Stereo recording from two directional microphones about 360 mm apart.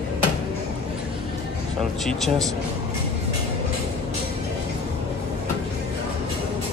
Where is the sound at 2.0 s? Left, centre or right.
Centre.